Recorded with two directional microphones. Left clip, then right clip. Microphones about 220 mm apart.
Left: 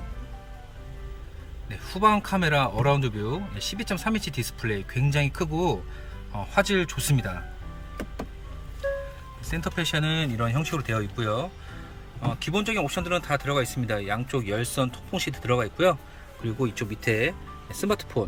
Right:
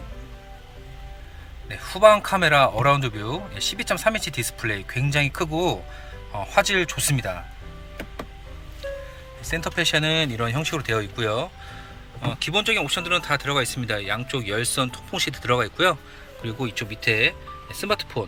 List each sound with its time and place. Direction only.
1.7 s speech: 10° left (ahead or behind)
9.5 s speech: 10° left (ahead or behind)